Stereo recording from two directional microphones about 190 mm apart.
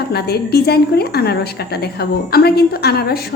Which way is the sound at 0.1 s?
55° left (ahead or behind).